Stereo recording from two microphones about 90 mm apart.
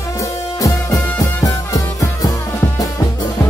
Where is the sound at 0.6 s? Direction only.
35° left (ahead or behind).